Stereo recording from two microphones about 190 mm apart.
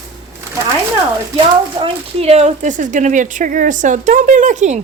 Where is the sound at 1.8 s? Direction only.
35° right (ahead or behind).